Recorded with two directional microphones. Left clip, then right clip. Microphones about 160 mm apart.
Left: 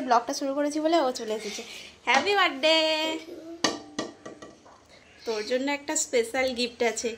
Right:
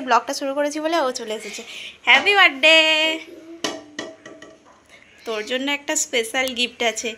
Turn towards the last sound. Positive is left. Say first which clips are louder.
# right 4 dB
turn(degrees=5)  # may be behind; listen again after turning